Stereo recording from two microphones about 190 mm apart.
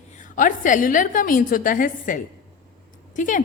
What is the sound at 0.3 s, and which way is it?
A woman's voice, 45° left (ahead or behind).